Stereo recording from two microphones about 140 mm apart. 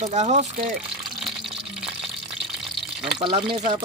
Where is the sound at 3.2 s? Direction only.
40° right (ahead or behind).